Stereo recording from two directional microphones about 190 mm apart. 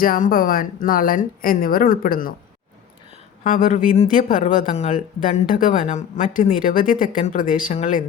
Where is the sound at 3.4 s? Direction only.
45° left (ahead or behind).